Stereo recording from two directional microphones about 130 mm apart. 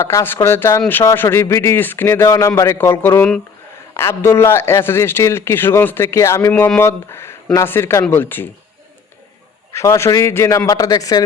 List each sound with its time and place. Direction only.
0.0 s speech: 20° left (ahead or behind)
9.7 s speech: 25° left (ahead or behind)